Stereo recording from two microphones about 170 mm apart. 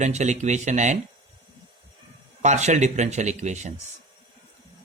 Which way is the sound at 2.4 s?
45° right (ahead or behind).